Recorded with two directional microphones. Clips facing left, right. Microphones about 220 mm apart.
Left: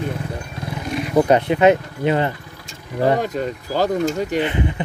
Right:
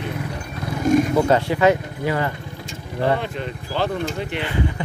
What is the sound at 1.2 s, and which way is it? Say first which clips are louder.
Speech: left 3 dB; 20° left (ahead or behind).